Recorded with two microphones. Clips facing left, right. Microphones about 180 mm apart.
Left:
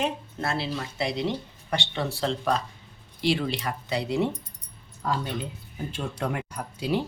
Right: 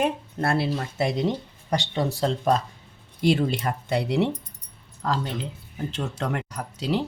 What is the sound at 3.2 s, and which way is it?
Speech, 45° right (ahead or behind).